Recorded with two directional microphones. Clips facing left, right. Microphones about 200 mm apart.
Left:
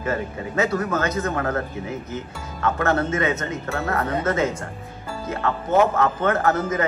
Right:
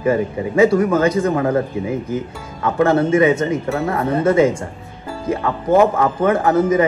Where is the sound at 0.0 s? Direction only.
10° right (ahead or behind).